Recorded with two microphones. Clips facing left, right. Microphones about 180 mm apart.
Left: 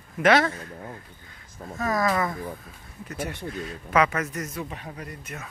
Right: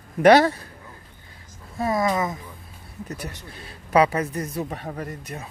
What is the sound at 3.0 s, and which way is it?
A man's voice, 35° right (ahead or behind).